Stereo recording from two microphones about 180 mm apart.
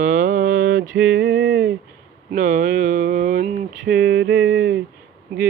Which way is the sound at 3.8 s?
90° right.